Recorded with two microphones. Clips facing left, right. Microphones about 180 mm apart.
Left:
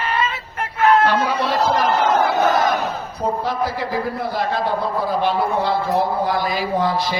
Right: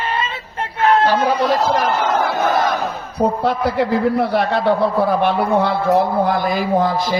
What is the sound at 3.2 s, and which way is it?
A man's voice, 70° right (ahead or behind).